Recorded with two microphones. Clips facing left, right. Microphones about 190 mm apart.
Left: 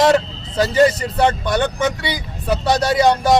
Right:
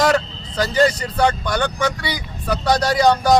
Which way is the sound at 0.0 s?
25° left (ahead or behind).